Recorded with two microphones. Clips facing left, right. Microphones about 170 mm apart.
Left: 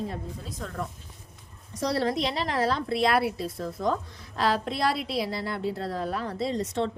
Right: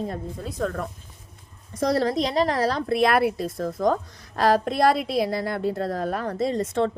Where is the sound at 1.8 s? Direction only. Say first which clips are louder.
Right 4 dB; 45° right (ahead or behind).